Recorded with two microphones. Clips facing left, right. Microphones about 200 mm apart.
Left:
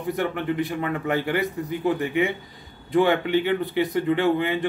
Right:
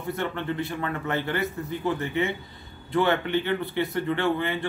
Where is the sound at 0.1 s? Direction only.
15° left (ahead or behind).